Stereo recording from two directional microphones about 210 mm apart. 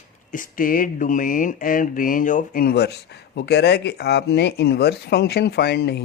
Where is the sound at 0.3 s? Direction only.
40° left (ahead or behind).